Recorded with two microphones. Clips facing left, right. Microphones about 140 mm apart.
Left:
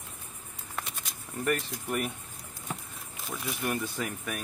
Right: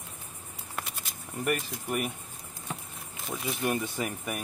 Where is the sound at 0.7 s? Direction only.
5° right (ahead or behind).